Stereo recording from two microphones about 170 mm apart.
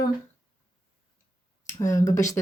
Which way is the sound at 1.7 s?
20° left (ahead or behind).